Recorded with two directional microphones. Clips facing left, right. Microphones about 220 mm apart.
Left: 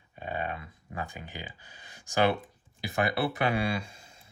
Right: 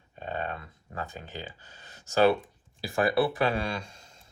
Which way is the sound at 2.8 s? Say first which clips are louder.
Right 4 dB; 20° left (ahead or behind).